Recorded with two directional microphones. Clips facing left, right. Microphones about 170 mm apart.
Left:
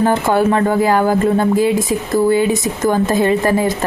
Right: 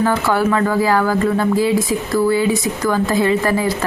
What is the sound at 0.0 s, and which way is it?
Speech, 20° left (ahead or behind).